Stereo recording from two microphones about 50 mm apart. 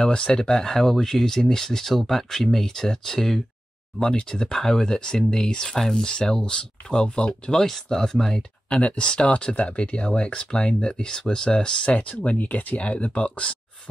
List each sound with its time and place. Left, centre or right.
0.0 s speech: centre
8.6 s speech: left